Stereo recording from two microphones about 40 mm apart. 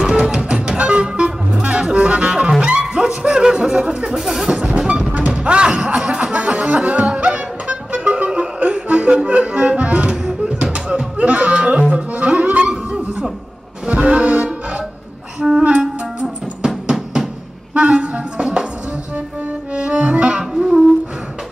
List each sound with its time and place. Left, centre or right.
0.2 s music: right
4.1 s speech: centre
4.7 s music: right
10.6 s music: right
11.9 s music: right
12.4 s a sound: right
13.8 s music: right
15.4 s music: centre; by 18.2 s right
18.4 s music: right
19.7 s accordion: right
20.5 s humming: centre